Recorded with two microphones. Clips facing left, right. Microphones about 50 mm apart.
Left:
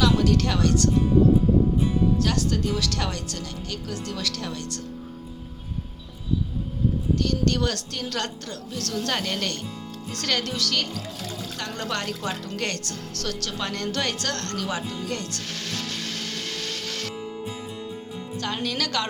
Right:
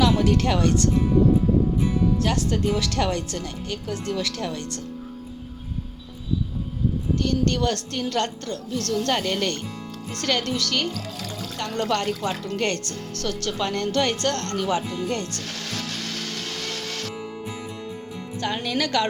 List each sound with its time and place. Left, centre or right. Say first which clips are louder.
0.0 s speech: right 1 dB; centre
2.1 s speech: right 1 dB; centre
7.2 s a woman's voice: right 3 dB; centre
18.3 s speech: right 3 dB; centre